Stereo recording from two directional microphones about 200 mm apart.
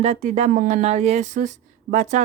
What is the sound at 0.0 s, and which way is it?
Speech, 35° right (ahead or behind).